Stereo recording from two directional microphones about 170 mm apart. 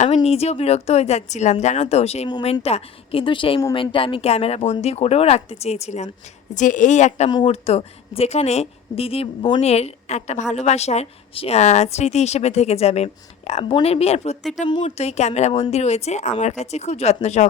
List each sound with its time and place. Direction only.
0.0 s a woman's voice: 40° left (ahead or behind)